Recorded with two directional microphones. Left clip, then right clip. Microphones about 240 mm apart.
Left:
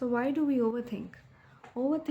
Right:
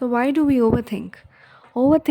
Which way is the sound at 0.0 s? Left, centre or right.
Right.